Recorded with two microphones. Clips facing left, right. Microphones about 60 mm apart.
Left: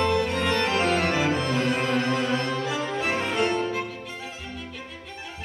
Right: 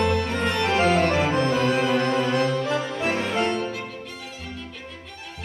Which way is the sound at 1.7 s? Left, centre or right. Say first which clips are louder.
Right 3 dB; centre.